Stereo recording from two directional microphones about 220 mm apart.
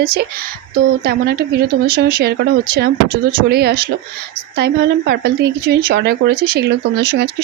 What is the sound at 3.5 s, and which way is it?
Speech, 45° right (ahead or behind).